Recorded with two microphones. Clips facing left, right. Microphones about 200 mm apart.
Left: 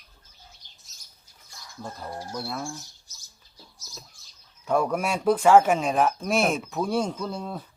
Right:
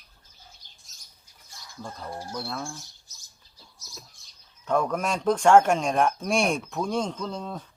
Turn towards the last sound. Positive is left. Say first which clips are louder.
# left 1 dB
turn(degrees=5)  # may be behind; listen again after turning